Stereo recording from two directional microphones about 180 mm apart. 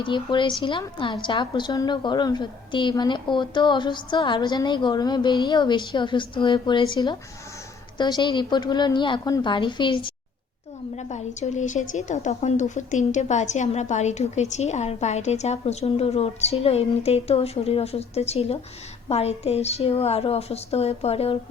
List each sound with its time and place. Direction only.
0.0 s a woman's voice: 25° left (ahead or behind)
10.9 s a woman's voice: 40° left (ahead or behind)